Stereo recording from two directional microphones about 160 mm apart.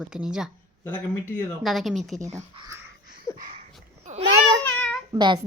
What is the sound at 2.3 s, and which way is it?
Speech, 20° right (ahead or behind).